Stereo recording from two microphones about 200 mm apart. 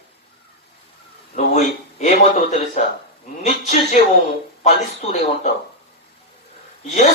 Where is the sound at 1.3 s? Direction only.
35° left (ahead or behind).